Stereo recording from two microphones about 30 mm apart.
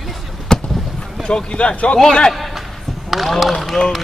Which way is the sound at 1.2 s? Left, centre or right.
Left.